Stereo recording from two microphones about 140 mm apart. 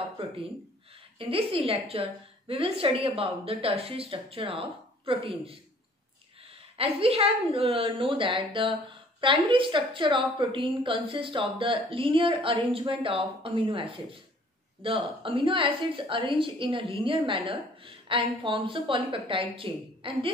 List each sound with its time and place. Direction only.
1.1 s a woman's voice: 40° right (ahead or behind)
6.8 s a woman's voice: 45° right (ahead or behind)